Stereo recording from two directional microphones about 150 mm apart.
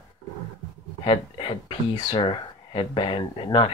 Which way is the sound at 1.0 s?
35° left (ahead or behind).